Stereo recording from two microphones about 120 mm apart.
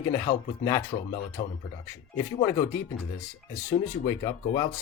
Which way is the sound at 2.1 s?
25° left (ahead or behind).